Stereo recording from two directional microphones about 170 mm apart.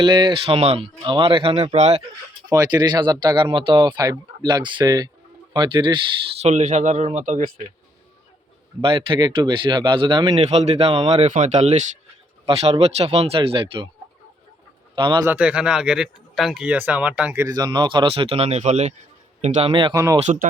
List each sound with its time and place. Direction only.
0.0 s speech: 25° right (ahead or behind)
2.5 s speech: 20° right (ahead or behind)
6.4 s speech: 45° right (ahead or behind)
8.8 s speech: 30° right (ahead or behind)
14.9 s speech: 25° right (ahead or behind)
15.2 s speech: 10° right (ahead or behind); by 20.0 s 30° right (ahead or behind)
20.2 s speech: 50° right (ahead or behind)